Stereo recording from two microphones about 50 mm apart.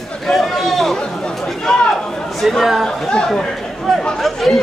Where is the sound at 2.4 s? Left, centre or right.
Centre.